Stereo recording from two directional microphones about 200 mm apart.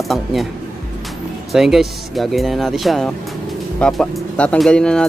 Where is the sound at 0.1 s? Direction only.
Centre (ahead or behind).